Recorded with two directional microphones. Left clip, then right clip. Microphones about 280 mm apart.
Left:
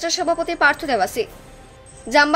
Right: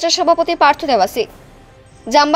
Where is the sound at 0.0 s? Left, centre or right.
Centre.